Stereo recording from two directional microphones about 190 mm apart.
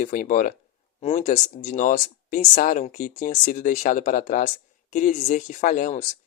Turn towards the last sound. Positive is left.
turn(degrees=45)  # may be behind; listen again after turning